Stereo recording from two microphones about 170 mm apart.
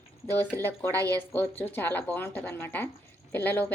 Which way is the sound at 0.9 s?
20° right (ahead or behind).